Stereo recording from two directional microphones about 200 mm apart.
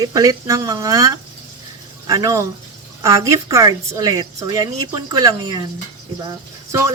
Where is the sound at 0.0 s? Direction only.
20° right (ahead or behind).